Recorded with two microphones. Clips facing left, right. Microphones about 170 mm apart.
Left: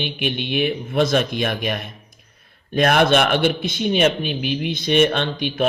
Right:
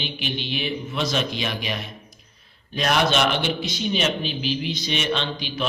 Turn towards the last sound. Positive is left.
turn(degrees=55)  # may be behind; listen again after turning